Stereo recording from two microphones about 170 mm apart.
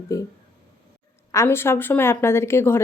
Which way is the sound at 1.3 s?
15° left (ahead or behind).